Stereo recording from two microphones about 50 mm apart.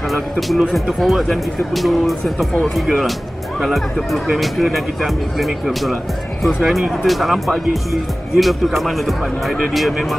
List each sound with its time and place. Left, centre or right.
0.1 s speech: centre